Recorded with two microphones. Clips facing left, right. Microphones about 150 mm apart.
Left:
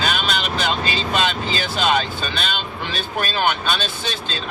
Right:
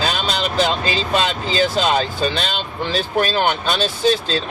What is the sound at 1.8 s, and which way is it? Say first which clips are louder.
Speech: right 2 dB; 35° right (ahead or behind).